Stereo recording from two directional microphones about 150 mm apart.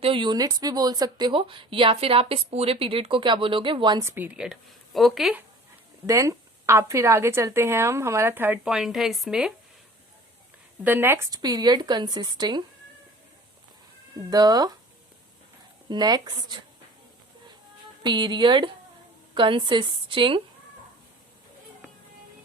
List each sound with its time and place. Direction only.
0.0 s speech: 35° right (ahead or behind)
4.0 s a woman's voice: 15° right (ahead or behind)
6.1 s a woman's voice: 20° right (ahead or behind)
8.7 s speech: 5° right (ahead or behind)
10.8 s speech: 15° right (ahead or behind)
14.3 s speech: 25° right (ahead or behind)
15.9 s speech: 25° right (ahead or behind)
18.0 s speech: 30° right (ahead or behind)